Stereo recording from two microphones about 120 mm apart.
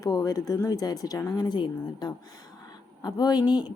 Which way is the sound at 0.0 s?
30° left (ahead or behind).